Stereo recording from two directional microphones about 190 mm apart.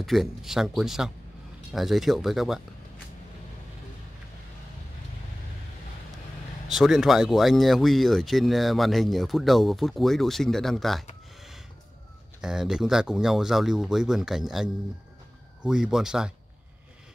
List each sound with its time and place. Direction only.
0.0 s speech: centre (ahead or behind)
6.7 s speech: centre (ahead or behind)
12.4 s speech: 5° right (ahead or behind)